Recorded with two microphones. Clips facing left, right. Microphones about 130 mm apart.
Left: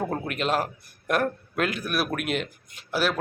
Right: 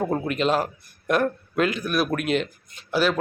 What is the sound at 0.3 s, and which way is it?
Speech, 5° left (ahead or behind).